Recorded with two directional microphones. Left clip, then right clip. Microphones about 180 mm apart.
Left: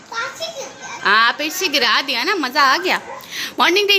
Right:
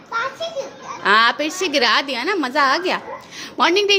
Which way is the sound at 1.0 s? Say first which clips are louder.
Even; 15° right (ahead or behind).